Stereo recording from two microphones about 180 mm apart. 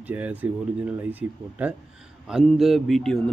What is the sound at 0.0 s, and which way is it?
A man's voice, 10° right (ahead or behind).